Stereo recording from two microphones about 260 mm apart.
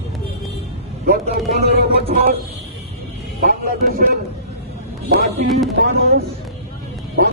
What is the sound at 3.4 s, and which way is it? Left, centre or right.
Speech, right.